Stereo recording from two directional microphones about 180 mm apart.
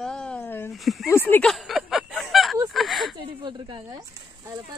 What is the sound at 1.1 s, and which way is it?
Speech, 10° left (ahead or behind).